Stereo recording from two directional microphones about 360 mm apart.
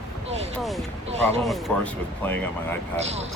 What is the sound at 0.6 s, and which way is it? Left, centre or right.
Speech, centre.